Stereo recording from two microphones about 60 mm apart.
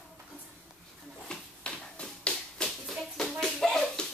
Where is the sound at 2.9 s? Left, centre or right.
Centre.